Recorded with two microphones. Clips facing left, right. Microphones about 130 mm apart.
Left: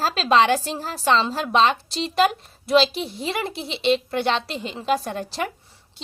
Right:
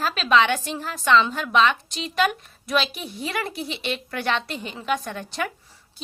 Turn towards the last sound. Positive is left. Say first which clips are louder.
# left 2 dB
turn(degrees=30)  # may be behind; listen again after turning